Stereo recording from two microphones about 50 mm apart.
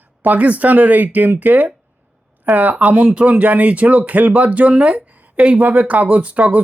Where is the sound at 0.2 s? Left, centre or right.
Right.